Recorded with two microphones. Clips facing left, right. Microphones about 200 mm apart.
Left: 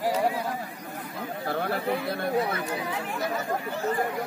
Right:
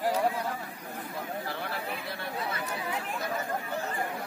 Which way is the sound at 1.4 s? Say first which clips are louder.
Left 7 dB; 50° left (ahead or behind).